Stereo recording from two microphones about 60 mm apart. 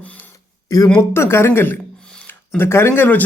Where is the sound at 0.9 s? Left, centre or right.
Left.